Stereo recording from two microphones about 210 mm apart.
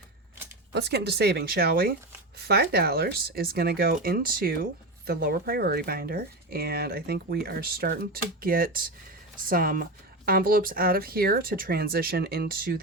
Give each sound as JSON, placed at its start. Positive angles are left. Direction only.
{"t": 0.7, "sound": "speech", "side_deg": -55}